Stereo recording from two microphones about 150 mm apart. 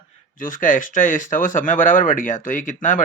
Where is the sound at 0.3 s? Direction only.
65° left (ahead or behind).